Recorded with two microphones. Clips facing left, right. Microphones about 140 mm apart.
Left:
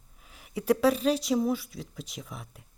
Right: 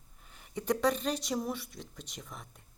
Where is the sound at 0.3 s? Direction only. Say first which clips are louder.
Left 6 dB; 5° left (ahead or behind).